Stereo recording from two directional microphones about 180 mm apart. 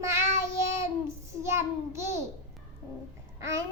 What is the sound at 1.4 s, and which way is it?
Child singing, 15° right (ahead or behind).